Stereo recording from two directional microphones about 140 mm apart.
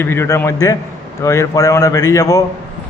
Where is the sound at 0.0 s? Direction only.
15° left (ahead or behind).